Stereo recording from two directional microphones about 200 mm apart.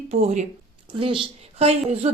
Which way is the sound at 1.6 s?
30° right (ahead or behind).